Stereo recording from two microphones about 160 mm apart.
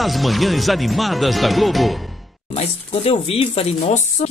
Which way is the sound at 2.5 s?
40° left (ahead or behind).